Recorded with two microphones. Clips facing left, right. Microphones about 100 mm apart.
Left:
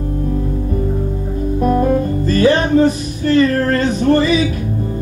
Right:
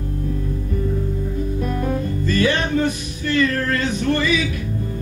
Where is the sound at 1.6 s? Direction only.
40° left (ahead or behind).